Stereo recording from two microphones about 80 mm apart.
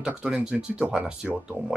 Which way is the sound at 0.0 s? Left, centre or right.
Centre.